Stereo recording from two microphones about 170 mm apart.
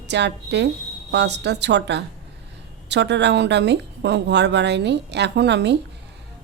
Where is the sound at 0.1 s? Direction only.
90° right.